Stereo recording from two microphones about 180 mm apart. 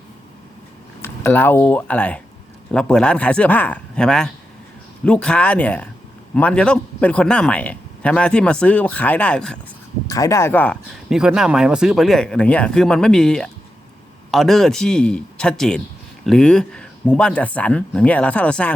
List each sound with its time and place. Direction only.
1.0 s a man's voice: 10° left (ahead or behind)
10.1 s speech: 20° left (ahead or behind)
11.1 s a man's voice: 5° right (ahead or behind)